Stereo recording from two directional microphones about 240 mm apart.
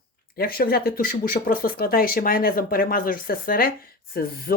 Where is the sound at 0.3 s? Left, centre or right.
Left.